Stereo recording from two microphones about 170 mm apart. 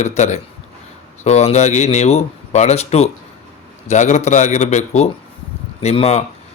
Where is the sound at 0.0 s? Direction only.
40° left (ahead or behind).